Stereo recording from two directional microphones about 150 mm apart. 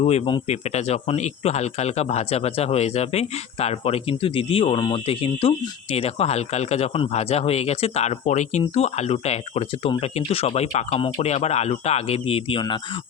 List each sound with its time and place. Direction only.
0.0 s speech: 40° left (ahead or behind)
0.4 s speech: 45° left (ahead or behind)